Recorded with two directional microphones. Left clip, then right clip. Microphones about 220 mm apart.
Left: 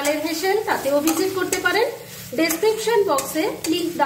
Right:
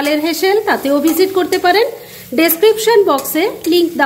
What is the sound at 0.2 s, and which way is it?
A woman's voice, 45° right (ahead or behind).